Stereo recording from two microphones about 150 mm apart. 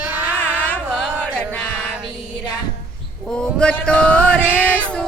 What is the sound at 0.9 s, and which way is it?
Chant, 5° right (ahead or behind).